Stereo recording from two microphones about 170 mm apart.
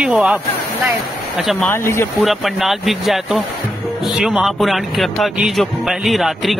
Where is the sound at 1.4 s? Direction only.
Centre (ahead or behind).